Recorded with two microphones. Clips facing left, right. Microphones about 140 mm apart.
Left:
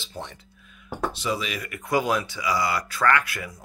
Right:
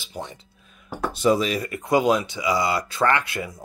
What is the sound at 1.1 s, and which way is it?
Speech, 45° right (ahead or behind).